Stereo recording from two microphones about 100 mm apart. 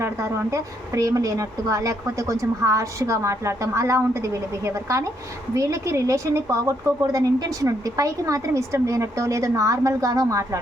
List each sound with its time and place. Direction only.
0.0 s a woman's voice: 30° right (ahead or behind)